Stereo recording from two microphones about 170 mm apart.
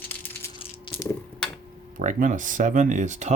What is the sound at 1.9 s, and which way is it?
Speech, 50° right (ahead or behind).